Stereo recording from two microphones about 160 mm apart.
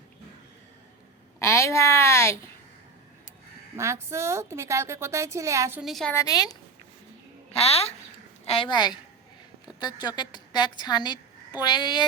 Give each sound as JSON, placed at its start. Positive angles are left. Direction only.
{"t": 1.4, "sound": "a woman's voice", "side_deg": 15}
{"t": 3.8, "sound": "a woman's voice", "side_deg": -15}
{"t": 5.8, "sound": "a woman's voice", "side_deg": 0}
{"t": 6.1, "sound": "a woman's voice", "side_deg": 25}
{"t": 7.5, "sound": "a woman's voice", "side_deg": 40}